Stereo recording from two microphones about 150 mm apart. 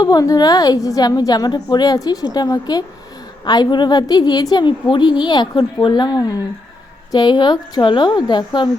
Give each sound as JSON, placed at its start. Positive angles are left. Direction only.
{"t": 0.0, "sound": "a woman's voice", "side_deg": 25}